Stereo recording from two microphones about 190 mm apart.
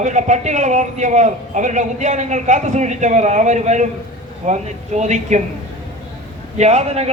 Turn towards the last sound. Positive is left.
turn(degrees=-35)  # may be behind; listen again after turning